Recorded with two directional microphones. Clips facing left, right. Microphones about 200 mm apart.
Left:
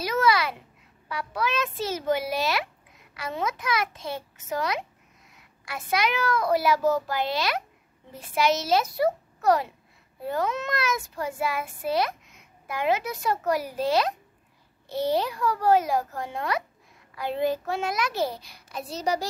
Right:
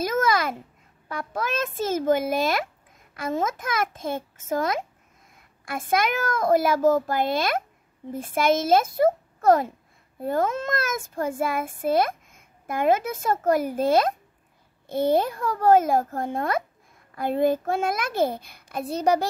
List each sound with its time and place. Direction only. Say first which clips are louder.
0.0 s babbling: right 1 dB; 45° right (ahead or behind)
1.0 s a child's voice: even; 50° right (ahead or behind)